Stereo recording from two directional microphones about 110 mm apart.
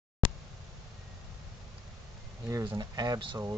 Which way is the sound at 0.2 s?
50° right (ahead or behind).